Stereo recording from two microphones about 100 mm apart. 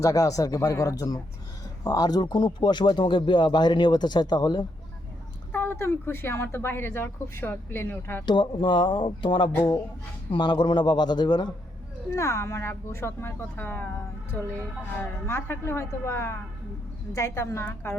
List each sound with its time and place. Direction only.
0.0 s speech: 35° left (ahead or behind)
5.5 s speech: 20° left (ahead or behind)
8.3 s speech: 55° left (ahead or behind)
12.1 s speech: 30° left (ahead or behind)
14.9 s speech: 20° left (ahead or behind)